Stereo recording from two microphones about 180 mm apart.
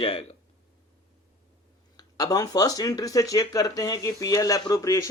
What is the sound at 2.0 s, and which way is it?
Speech, 20° left (ahead or behind).